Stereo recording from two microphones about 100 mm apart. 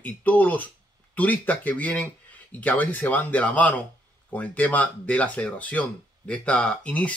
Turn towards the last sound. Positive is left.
turn(degrees=10)  # may be behind; listen again after turning